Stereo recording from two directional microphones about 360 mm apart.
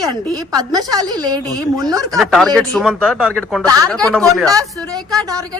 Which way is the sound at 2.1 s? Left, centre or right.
Centre.